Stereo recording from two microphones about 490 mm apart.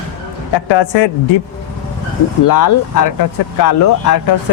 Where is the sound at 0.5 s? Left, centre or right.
Left.